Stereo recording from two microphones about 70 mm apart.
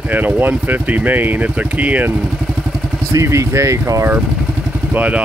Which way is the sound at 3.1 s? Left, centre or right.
Right.